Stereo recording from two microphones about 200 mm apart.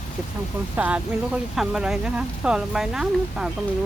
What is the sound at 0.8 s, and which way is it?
Speech, 5° right (ahead or behind).